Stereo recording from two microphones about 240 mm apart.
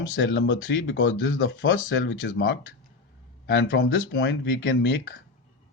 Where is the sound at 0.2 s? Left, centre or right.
Left.